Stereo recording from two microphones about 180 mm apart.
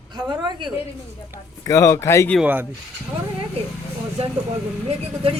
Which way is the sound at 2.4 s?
10° right (ahead or behind).